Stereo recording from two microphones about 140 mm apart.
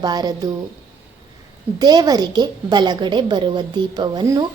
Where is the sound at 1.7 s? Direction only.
30° right (ahead or behind).